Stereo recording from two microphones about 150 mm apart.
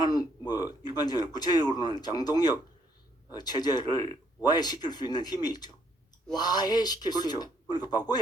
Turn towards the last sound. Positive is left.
turn(degrees=30)  # may be behind; listen again after turning